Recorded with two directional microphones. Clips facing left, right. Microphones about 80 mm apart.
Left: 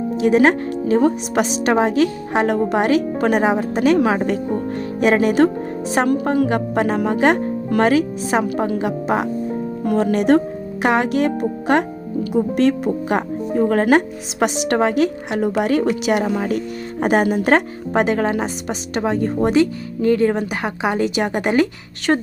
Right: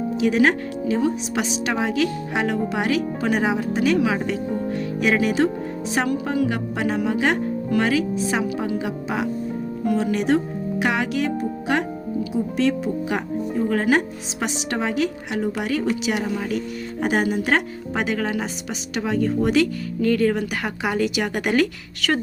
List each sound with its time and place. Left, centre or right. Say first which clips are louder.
0.2 s a woman's voice: left 5 dB; left
20.0 s a woman's voice: left 3 dB; left